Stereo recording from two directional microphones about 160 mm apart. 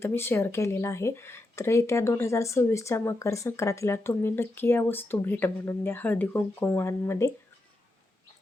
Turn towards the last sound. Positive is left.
turn(degrees=15)  # may be behind; listen again after turning